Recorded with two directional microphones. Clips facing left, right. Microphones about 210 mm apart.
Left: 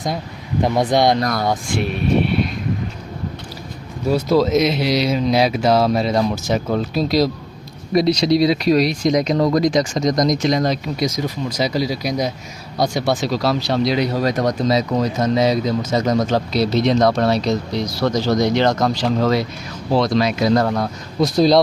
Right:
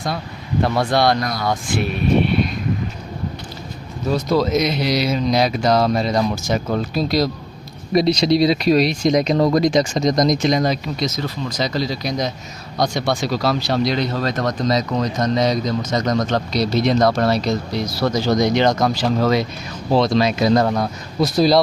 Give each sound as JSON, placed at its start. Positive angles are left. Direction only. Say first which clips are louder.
{"t": 0.6, "sound": "speech", "louder": "left 2 dB", "side_deg": 15}
{"t": 4.0, "sound": "speech", "louder": "left 2 dB", "side_deg": 5}
{"t": 7.9, "sound": "speech", "louder": "even", "side_deg": -25}
{"t": 10.6, "sound": "speech", "louder": "even", "side_deg": -5}
{"t": 11.0, "sound": "speech", "louder": "left 4 dB", "side_deg": 10}
{"t": 20.0, "sound": "speech", "louder": "right 1 dB", "side_deg": -25}
{"t": 21.2, "sound": "speech", "louder": "left 1 dB", "side_deg": -5}